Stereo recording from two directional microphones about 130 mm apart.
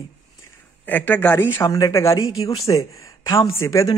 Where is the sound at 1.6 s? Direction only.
30° left (ahead or behind).